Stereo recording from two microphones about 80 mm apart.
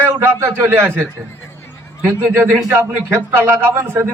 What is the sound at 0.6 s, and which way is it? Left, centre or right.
Speech, right.